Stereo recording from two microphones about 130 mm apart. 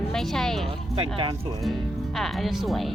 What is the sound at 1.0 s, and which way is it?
Speech, 45° right (ahead or behind).